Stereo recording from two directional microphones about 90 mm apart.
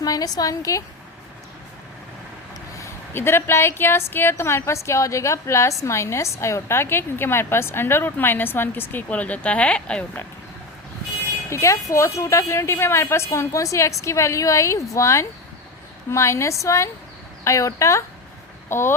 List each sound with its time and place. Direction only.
0.0 s a woman's voice: 45° left (ahead or behind)
2.7 s a woman's voice: 30° left (ahead or behind); by 10.1 s 10° left (ahead or behind)
11.4 s a woman's voice: 35° left (ahead or behind)